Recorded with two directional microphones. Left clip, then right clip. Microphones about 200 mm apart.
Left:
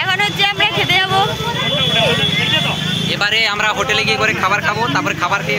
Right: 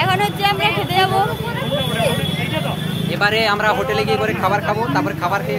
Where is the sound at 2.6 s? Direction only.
40° right (ahead or behind).